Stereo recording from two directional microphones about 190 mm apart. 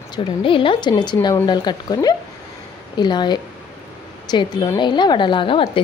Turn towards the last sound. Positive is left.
turn(degrees=25)  # may be behind; listen again after turning